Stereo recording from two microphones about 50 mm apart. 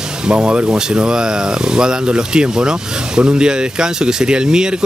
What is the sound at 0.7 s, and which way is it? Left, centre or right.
Speech, centre.